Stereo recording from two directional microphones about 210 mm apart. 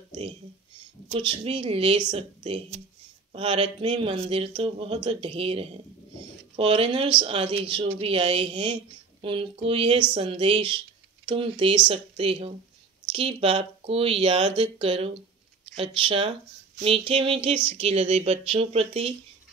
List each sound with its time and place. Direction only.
1.0 s speech: 25° right (ahead or behind)